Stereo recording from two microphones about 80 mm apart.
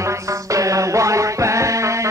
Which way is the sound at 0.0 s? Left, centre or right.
Right.